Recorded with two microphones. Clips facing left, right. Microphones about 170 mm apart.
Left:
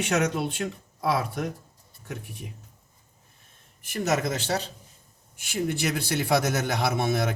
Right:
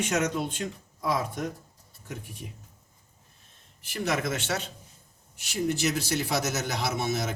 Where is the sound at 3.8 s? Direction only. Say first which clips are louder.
Left 3 dB; 45° left (ahead or behind).